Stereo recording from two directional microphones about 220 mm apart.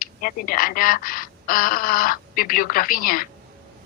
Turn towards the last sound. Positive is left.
turn(degrees=40)  # may be behind; listen again after turning